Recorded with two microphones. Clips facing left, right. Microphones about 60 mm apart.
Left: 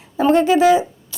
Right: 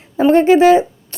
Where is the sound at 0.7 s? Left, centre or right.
Right.